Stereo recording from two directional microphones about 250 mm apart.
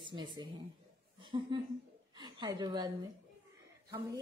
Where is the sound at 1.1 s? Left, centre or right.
Centre.